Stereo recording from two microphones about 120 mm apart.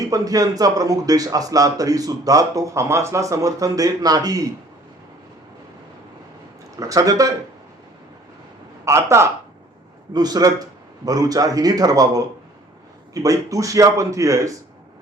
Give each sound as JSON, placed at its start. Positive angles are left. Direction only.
{"t": 0.0, "sound": "a man's voice", "side_deg": -30}
{"t": 6.7, "sound": "a man's voice", "side_deg": -30}
{"t": 8.8, "sound": "a man's voice", "side_deg": -25}
{"t": 10.1, "sound": "a man's voice", "side_deg": -35}